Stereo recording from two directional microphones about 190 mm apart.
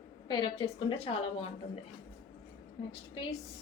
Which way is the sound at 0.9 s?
35° left (ahead or behind).